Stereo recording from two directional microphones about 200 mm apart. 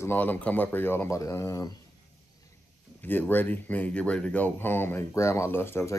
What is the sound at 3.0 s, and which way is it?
Speech, 10° left (ahead or behind).